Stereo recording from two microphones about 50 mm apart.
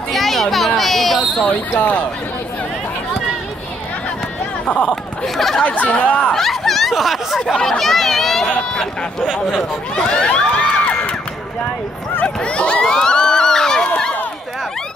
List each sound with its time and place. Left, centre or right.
0.1 s a sound: centre
1.4 s speech: left
4.8 s speech: centre
5.6 s speech: left
6.3 s speech: centre
7.5 s speech: centre
8.5 s speech: centre
10.0 s a sound: centre
12.4 s a sound: left